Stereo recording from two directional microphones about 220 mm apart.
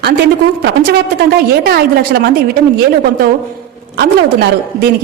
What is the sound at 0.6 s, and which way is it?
A woman's voice, 45° right (ahead or behind).